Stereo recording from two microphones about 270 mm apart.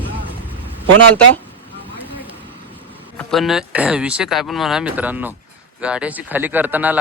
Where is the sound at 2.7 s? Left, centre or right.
Centre.